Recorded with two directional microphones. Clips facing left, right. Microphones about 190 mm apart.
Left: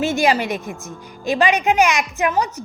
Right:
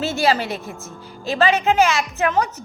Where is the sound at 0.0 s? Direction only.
15° left (ahead or behind).